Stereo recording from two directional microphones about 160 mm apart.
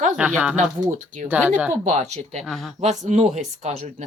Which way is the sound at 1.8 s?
45° right (ahead or behind).